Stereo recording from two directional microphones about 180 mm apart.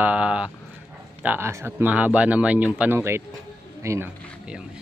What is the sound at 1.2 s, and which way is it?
Speech, 10° right (ahead or behind).